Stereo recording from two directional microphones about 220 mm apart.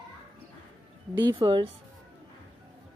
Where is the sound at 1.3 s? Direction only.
20° right (ahead or behind).